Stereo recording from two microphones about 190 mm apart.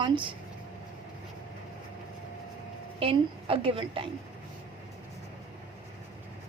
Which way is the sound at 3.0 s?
30° right (ahead or behind).